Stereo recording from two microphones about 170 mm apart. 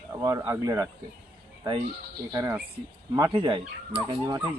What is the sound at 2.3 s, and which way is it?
Speech, 20° right (ahead or behind).